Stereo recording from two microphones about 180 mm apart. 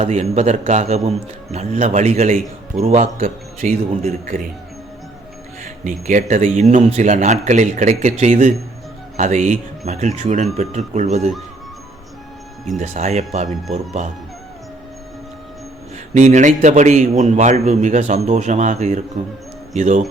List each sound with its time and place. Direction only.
0.0 s a man's voice: 40° right (ahead or behind)
5.6 s a man's voice: 45° right (ahead or behind)
12.8 s a man's voice: 40° right (ahead or behind)
16.1 s a man's voice: 40° right (ahead or behind)